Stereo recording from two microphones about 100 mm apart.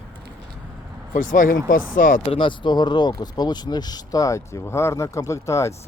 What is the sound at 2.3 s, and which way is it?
Speech, 55° left (ahead or behind).